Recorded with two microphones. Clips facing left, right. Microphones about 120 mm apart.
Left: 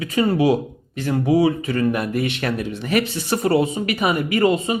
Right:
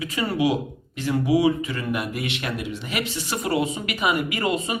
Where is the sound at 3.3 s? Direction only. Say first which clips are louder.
Left 5 dB; 35° left (ahead or behind).